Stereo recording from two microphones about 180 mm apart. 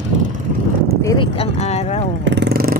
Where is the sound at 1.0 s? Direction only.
30° left (ahead or behind).